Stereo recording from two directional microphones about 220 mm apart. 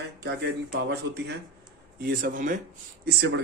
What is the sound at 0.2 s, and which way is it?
Speech, 50° right (ahead or behind).